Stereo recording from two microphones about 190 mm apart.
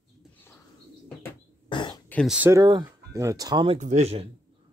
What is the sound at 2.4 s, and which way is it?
Speech, 15° right (ahead or behind).